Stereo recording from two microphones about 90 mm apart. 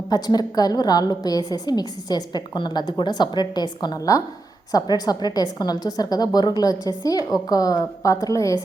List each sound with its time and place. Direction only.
0.1 s a woman's voice: 45° left (ahead or behind)